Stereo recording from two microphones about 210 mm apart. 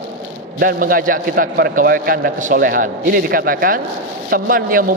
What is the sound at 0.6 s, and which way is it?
A man's voice, 45° right (ahead or behind).